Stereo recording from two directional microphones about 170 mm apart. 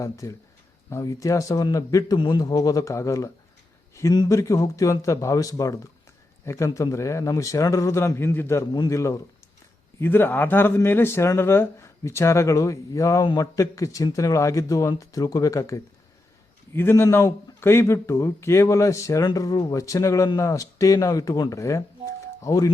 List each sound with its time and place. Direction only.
0.0 s speech: 20° left (ahead or behind)